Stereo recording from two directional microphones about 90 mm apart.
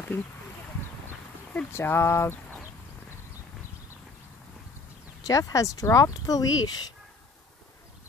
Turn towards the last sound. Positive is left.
turn(degrees=50)  # may be behind; listen again after turning